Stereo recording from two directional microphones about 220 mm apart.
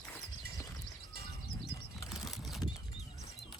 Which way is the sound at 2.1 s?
Centre (ahead or behind).